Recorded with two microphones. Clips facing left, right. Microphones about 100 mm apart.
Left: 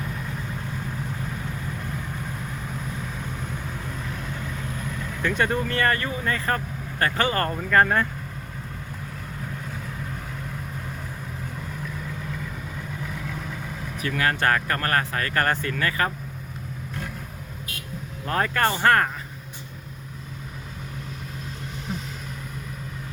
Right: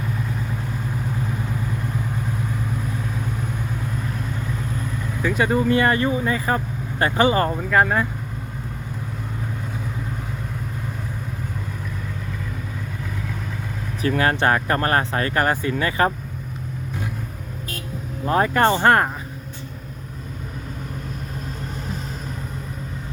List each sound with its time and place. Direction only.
5.2 s speech: 5° right (ahead or behind)
13.1 s vehicle: centre (ahead or behind)
14.0 s speech: 30° right (ahead or behind)
18.3 s speech: 20° right (ahead or behind)